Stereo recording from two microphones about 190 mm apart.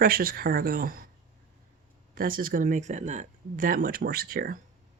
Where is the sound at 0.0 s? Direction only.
50° right (ahead or behind).